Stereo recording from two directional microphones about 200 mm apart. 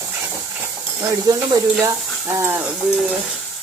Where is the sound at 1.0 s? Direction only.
15° right (ahead or behind).